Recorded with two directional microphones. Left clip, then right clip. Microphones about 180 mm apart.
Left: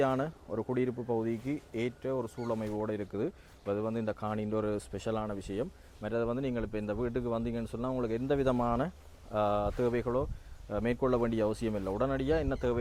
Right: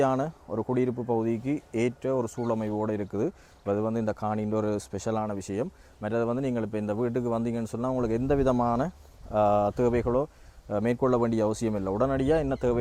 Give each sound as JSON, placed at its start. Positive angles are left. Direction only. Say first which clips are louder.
{"t": 0.0, "sound": "speech", "louder": "right 5 dB", "side_deg": -35}
{"t": 1.7, "sound": "speech", "louder": "right 7 dB", "side_deg": -50}
{"t": 9.3, "sound": "speech", "louder": "right 7 dB", "side_deg": -40}